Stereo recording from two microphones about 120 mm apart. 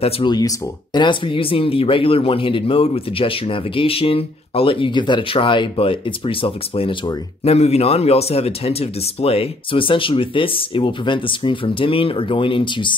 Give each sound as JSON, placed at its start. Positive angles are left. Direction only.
{"t": 0.2, "sound": "speech", "side_deg": 35}
{"t": 7.4, "sound": "speech", "side_deg": 60}